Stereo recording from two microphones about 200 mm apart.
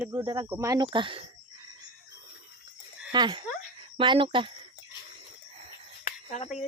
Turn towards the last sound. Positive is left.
turn(degrees=40)  # may be behind; listen again after turning